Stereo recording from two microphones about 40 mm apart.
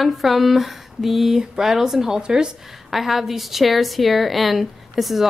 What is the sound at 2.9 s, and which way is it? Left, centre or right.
Speech, centre.